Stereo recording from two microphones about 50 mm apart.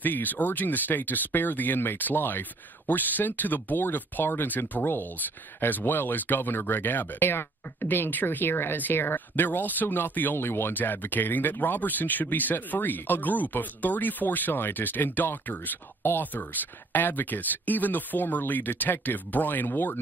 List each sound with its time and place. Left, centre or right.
0.0 s speech: left